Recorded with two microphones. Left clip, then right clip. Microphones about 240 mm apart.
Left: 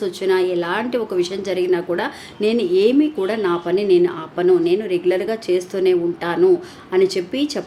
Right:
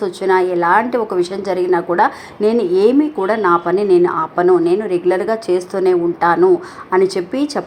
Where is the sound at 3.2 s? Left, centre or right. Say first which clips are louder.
Right 6 dB; centre.